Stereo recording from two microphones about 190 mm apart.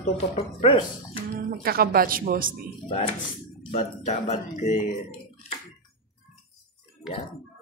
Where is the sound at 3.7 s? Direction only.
40° left (ahead or behind).